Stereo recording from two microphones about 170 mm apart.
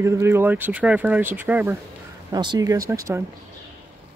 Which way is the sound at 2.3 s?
25° right (ahead or behind).